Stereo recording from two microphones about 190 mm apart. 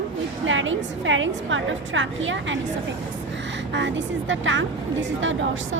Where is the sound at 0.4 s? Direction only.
85° right.